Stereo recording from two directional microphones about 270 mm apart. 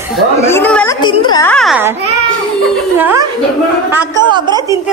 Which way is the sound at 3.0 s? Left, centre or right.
Centre.